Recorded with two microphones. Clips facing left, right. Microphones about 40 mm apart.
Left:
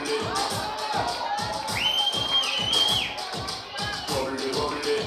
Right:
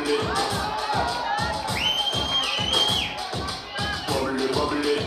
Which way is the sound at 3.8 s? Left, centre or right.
Right.